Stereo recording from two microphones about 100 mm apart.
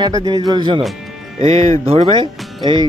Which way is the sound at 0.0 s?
40° right (ahead or behind).